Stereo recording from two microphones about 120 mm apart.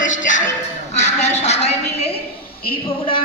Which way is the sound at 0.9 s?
70° left (ahead or behind).